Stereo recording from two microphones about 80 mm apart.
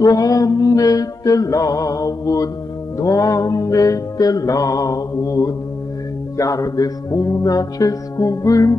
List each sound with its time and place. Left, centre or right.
0.0 s music: left